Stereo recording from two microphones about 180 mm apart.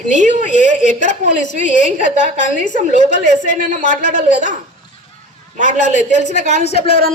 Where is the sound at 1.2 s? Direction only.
35° right (ahead or behind).